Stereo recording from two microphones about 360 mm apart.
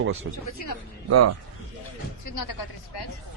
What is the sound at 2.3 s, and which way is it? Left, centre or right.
Speech, left.